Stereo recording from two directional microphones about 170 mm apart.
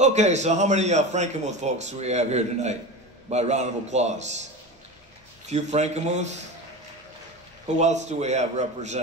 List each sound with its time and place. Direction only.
0.0 s a man's voice: 40° right (ahead or behind)
5.5 s a man's voice: 40° right (ahead or behind)
7.8 s a man's voice: 45° right (ahead or behind)